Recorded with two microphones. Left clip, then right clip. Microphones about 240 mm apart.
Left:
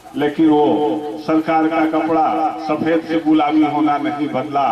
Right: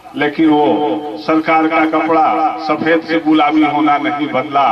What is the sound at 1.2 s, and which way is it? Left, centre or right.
A man's voice, centre.